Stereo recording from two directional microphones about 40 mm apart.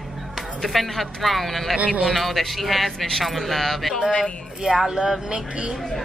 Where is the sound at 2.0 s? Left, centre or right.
Centre.